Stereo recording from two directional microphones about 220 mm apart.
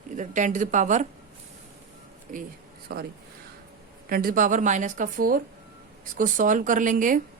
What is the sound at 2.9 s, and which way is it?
Speech, 45° right (ahead or behind).